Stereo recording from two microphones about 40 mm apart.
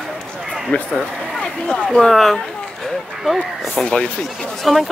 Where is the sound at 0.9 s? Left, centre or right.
Left.